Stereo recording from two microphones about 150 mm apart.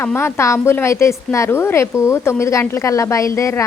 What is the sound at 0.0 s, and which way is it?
A woman's voice, 15° left (ahead or behind).